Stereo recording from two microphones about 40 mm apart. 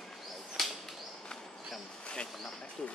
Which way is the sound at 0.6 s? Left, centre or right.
Centre.